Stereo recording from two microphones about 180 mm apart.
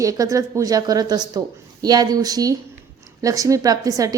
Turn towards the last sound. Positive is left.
turn(degrees=-20)  # may be behind; listen again after turning